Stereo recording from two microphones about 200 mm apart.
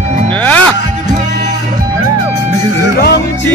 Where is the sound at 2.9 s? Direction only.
55° left (ahead or behind).